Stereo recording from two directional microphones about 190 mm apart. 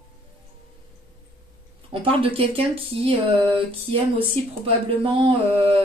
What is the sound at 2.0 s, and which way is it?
Speech, 30° right (ahead or behind).